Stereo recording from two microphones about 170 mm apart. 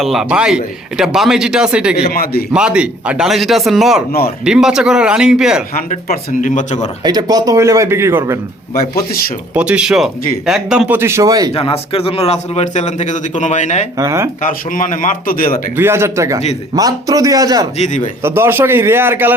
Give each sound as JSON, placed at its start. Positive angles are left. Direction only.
{"t": 0.0, "sound": "speech", "side_deg": 0}
{"t": 2.1, "sound": "a man's voice", "side_deg": 60}
{"t": 2.5, "sound": "speech", "side_deg": -5}
{"t": 5.7, "sound": "speech", "side_deg": 50}
{"t": 7.0, "sound": "speech", "side_deg": -25}
{"t": 9.6, "sound": "a man's voice", "side_deg": -5}
{"t": 11.5, "sound": "a man's voice", "side_deg": 35}
{"t": 14.0, "sound": "a man's voice", "side_deg": -15}
{"t": 14.4, "sound": "speech", "side_deg": 50}
{"t": 15.7, "sound": "a man's voice", "side_deg": -15}
{"t": 17.7, "sound": "speech", "side_deg": 45}
{"t": 18.2, "sound": "a man's voice", "side_deg": -15}